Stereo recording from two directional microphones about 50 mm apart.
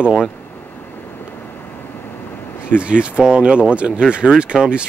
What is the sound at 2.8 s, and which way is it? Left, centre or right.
Speech, right.